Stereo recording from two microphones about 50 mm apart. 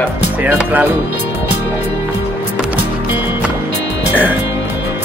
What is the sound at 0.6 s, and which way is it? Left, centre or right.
Speech, right.